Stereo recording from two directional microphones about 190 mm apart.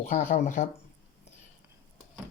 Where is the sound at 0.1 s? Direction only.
45° left (ahead or behind).